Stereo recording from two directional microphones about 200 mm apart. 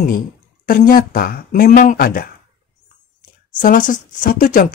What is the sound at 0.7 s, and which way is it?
Speech, 45° left (ahead or behind).